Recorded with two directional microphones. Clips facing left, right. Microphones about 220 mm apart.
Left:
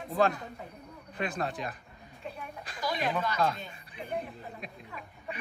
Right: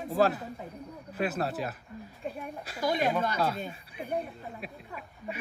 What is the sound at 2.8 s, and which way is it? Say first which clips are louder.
Speech: right 4 dB; 50° right (ahead or behind).